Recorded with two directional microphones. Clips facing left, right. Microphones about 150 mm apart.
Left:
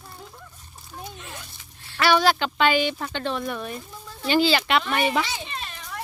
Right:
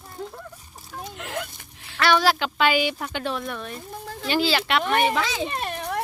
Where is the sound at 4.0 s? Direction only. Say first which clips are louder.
Right 6 dB; 90° right.